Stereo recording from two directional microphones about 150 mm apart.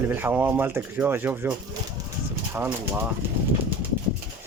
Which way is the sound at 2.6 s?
10° right (ahead or behind).